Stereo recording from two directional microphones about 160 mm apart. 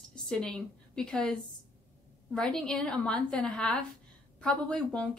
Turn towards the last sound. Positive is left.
turn(degrees=5)  # may be behind; listen again after turning